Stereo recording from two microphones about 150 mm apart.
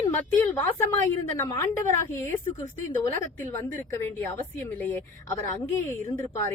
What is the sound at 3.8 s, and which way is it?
A woman's voice, 15° left (ahead or behind).